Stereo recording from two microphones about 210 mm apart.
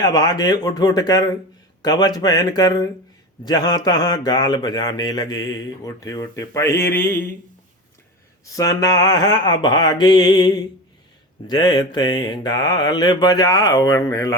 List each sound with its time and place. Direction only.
0.0 s speech: 20° left (ahead or behind)
8.5 s speech: 15° left (ahead or behind)